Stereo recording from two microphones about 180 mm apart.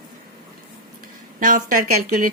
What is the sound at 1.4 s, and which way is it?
Speech, 50° right (ahead or behind).